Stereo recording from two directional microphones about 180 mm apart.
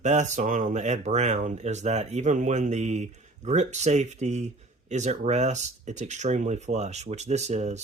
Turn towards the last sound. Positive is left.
turn(degrees=-40)  # may be behind; listen again after turning